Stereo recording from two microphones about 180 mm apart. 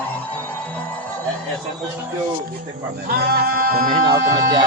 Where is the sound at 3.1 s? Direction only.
60° right (ahead or behind).